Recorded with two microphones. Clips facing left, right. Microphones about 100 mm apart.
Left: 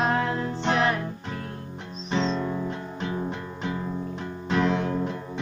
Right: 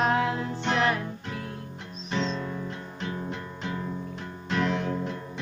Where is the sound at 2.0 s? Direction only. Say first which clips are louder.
Left 3 dB; 30° left (ahead or behind).